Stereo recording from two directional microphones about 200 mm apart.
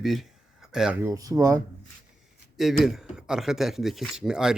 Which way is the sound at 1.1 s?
15° right (ahead or behind).